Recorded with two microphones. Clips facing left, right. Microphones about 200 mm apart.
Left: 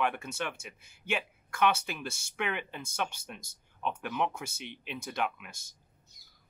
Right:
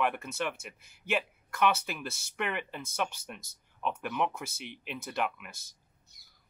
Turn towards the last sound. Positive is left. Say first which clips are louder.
# right 1 dB
turn(degrees=-5)  # may be behind; listen again after turning